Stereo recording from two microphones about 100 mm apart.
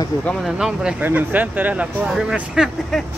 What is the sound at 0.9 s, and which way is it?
Speech, 15° right (ahead or behind).